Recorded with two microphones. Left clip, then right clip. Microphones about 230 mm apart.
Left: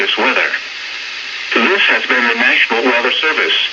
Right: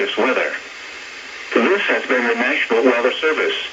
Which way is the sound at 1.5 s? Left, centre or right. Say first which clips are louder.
Left 4 dB; right.